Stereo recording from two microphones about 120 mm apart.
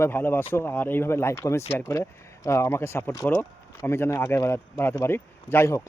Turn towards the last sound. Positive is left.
turn(degrees=25)  # may be behind; listen again after turning